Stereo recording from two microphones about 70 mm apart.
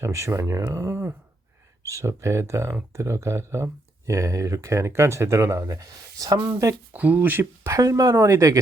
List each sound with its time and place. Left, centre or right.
0.0 s speech: right
6.9 s speech: right
7.6 s speech: right
8.1 s speech: right